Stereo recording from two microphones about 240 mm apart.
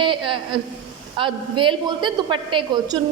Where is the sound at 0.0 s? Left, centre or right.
Right.